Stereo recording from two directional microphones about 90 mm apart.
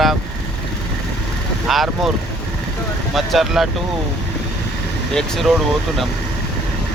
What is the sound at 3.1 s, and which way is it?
Speech, centre (ahead or behind).